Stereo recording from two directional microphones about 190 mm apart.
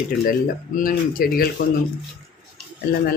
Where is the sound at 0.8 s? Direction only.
50° left (ahead or behind).